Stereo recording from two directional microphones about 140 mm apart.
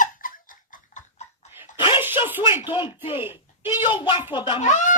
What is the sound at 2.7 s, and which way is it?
Speech, 35° left (ahead or behind).